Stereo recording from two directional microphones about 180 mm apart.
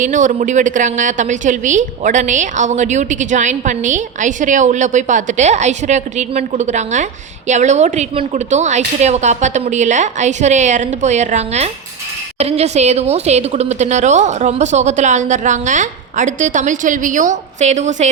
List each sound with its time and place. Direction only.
0.0 s a woman's voice: 45° right (ahead or behind)